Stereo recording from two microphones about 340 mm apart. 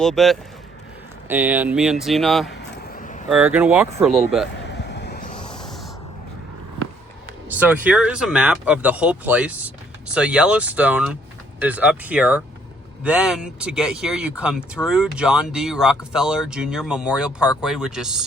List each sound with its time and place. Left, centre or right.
0.0 s speech: centre
2.6 s vehicle: left
3.2 s speech: centre
4.5 s a sound: left
5.5 s a sound: centre
7.4 s speech: centre